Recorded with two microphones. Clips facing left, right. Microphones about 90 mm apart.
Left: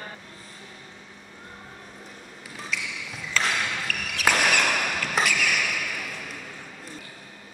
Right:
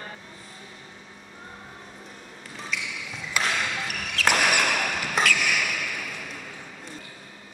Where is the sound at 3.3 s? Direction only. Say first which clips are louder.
Left 1 dB; 15° right (ahead or behind).